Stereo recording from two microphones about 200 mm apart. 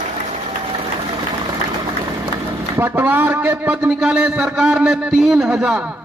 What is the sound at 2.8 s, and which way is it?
A man's voice, 10° right (ahead or behind).